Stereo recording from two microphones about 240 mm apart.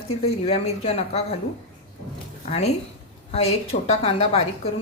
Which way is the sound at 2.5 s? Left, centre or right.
Left.